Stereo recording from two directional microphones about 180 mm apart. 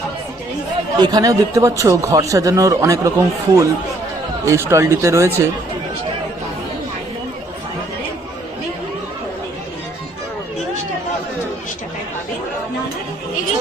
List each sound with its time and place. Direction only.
0.9 s a man's voice: 20° right (ahead or behind)